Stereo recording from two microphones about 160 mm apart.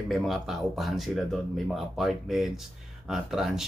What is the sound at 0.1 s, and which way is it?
Speech, centre (ahead or behind).